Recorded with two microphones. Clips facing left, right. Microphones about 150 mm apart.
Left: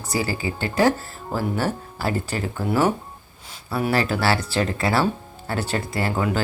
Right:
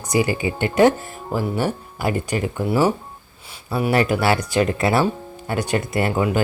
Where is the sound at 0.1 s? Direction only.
20° right (ahead or behind).